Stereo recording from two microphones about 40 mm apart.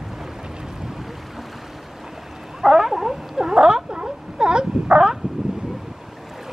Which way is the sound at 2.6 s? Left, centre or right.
Centre.